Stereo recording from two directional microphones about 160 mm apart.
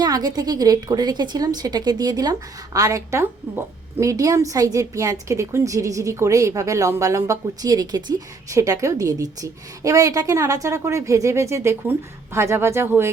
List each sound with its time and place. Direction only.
0.0 s a woman's voice: 25° right (ahead or behind)